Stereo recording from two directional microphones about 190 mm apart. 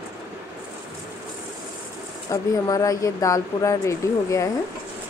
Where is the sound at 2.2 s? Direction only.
15° left (ahead or behind).